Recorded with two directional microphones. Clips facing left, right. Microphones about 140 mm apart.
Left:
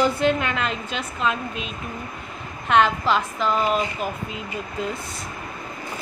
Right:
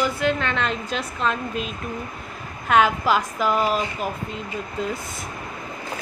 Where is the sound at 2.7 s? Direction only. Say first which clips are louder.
Even; 5° right (ahead or behind).